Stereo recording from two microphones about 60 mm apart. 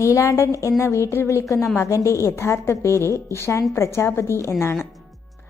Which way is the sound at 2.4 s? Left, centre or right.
Left.